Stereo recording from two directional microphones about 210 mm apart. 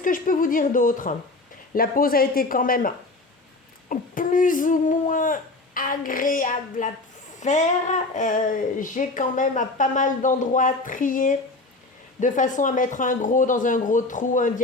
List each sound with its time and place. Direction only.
0.0 s speech: 40° left (ahead or behind)